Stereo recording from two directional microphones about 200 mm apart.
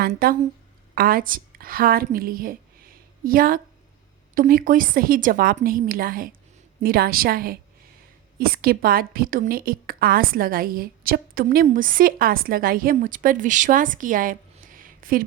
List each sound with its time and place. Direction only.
0.0 s a woman's voice: 45° right (ahead or behind)